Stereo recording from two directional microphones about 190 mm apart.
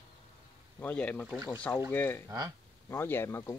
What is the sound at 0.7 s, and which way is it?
Speech, 10° left (ahead or behind).